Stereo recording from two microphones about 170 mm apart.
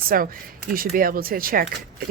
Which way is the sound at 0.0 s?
60° right (ahead or behind).